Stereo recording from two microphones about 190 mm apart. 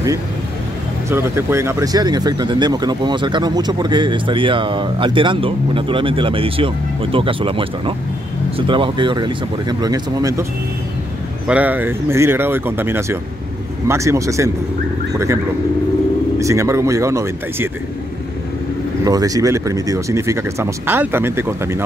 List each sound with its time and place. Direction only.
1.1 s speech: 15° right (ahead or behind)
11.4 s speech: 5° right (ahead or behind)
16.3 s speech: 15° right (ahead or behind)
19.0 s speech: 20° right (ahead or behind)